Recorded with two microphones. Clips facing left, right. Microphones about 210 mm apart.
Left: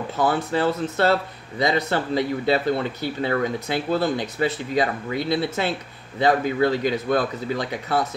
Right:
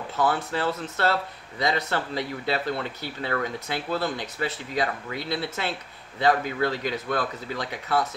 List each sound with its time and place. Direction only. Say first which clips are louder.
0.2 s speech: left 4 dB; 15° left (ahead or behind)